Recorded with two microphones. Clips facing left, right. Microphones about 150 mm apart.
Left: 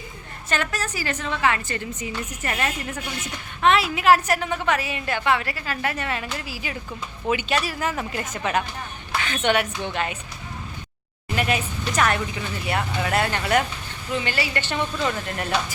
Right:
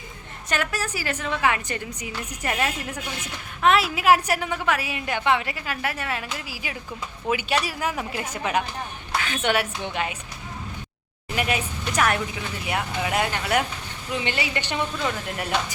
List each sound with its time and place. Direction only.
0.5 s a woman's voice: 10° right (ahead or behind)
11.3 s a woman's voice: 5° right (ahead or behind)
14.3 s a woman's voice: 15° right (ahead or behind)